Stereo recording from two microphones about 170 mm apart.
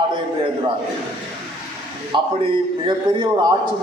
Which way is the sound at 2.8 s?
25° right (ahead or behind).